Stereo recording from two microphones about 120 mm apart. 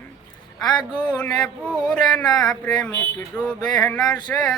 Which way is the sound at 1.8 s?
5° left (ahead or behind).